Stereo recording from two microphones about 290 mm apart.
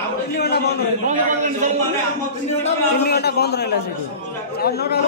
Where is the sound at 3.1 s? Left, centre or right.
Left.